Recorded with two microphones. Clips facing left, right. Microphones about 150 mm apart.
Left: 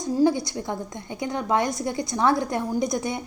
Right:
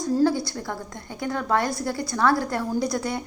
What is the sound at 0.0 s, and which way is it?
A woman's voice, 15° left (ahead or behind).